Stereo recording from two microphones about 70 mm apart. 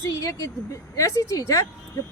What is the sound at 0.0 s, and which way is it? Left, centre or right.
A woman's voice, left.